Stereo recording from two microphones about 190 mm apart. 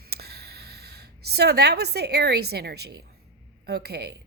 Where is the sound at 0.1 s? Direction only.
55° right (ahead or behind).